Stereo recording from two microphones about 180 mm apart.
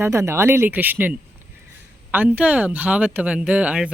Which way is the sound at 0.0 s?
15° right (ahead or behind).